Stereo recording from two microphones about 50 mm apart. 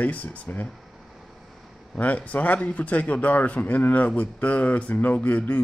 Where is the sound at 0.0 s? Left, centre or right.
Left.